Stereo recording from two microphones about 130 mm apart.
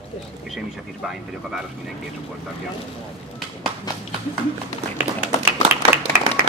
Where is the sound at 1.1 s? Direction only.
5° right (ahead or behind).